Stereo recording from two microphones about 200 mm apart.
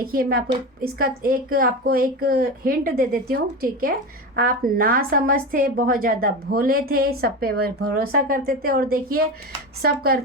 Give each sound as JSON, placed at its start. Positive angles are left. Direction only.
{"t": 0.0, "sound": "a woman's voice", "side_deg": -45}